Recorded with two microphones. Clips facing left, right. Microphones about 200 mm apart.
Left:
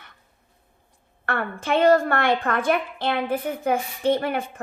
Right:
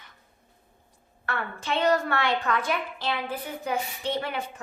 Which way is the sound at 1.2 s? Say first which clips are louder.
Left 5 dB; 55° left (ahead or behind).